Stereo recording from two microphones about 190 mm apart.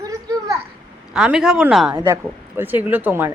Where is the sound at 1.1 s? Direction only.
5° right (ahead or behind).